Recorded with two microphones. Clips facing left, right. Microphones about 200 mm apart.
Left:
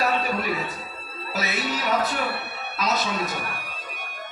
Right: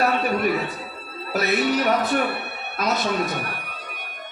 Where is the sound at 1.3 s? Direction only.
55° right (ahead or behind).